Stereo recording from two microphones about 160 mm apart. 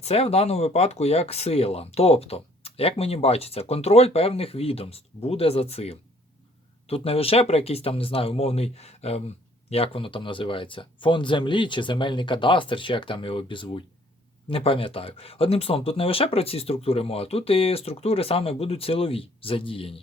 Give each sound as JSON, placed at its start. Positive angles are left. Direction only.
{"t": 0.0, "sound": "speech", "side_deg": 40}